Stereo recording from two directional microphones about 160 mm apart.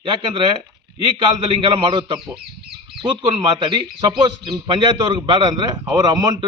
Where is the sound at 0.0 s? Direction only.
35° right (ahead or behind).